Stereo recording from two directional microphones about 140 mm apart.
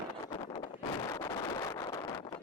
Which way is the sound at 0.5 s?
25° left (ahead or behind).